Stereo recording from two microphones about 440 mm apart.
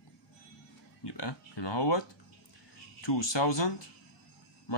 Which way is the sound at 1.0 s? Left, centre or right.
Left.